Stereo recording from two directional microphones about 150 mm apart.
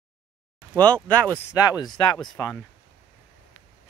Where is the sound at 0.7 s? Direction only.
10° left (ahead or behind).